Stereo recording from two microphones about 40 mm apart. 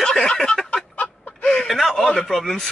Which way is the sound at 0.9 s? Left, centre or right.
Left.